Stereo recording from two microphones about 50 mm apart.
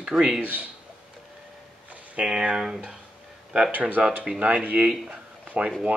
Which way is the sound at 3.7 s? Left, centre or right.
Right.